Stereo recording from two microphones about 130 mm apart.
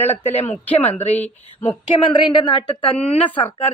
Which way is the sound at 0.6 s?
10° left (ahead or behind).